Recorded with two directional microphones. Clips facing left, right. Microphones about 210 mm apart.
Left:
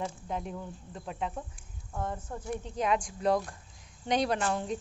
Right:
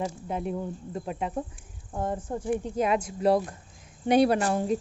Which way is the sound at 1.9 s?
30° right (ahead or behind).